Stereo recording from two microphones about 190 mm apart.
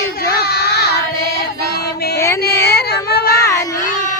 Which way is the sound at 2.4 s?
55° left (ahead or behind).